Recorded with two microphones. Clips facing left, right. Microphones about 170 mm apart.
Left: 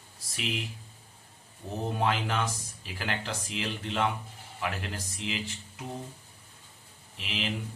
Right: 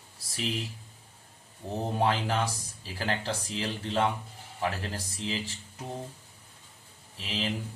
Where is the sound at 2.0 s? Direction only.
35° right (ahead or behind).